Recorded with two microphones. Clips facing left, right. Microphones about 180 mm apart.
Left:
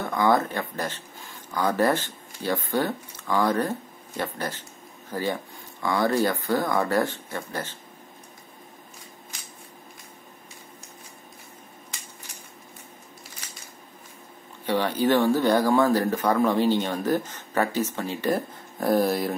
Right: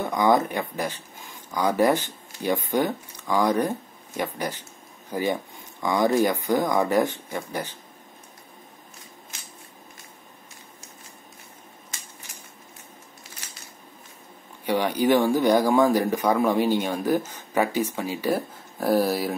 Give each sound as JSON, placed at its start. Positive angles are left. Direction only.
{"t": 0.0, "sound": "speech", "side_deg": -15}
{"t": 14.7, "sound": "speech", "side_deg": -15}